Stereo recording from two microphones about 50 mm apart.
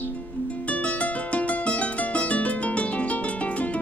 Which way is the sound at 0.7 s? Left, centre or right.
Left.